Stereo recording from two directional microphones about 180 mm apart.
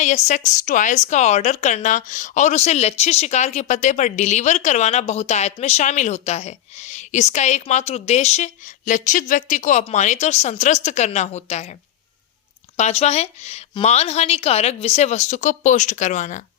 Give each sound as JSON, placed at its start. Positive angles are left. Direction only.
{"t": 0.0, "sound": "speech", "side_deg": 40}
{"t": 12.7, "sound": "speech", "side_deg": 40}